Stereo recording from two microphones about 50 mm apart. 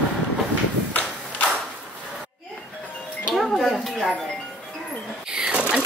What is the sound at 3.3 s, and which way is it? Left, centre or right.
Music, centre.